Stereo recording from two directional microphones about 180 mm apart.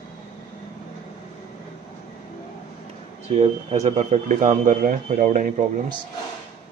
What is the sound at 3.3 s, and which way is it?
Speech, 35° right (ahead or behind).